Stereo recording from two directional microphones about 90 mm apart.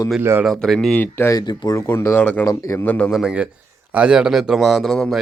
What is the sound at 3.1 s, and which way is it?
A man's voice, 10° right (ahead or behind).